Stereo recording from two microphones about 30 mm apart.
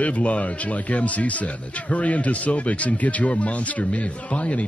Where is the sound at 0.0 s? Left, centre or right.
Left.